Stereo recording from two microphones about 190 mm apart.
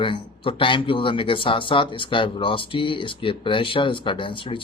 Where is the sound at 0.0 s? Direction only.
25° left (ahead or behind).